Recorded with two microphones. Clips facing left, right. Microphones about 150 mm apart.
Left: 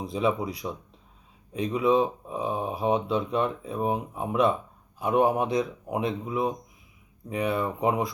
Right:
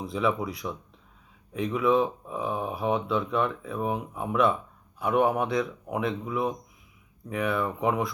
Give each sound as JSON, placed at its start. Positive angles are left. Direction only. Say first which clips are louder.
{"t": 0.0, "sound": "speech", "louder": "left 1 dB", "side_deg": 20}